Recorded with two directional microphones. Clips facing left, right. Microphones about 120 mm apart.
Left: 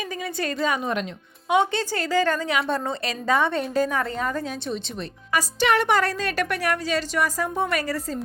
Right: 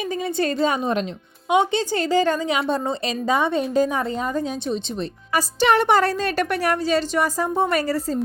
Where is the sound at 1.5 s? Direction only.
20° right (ahead or behind).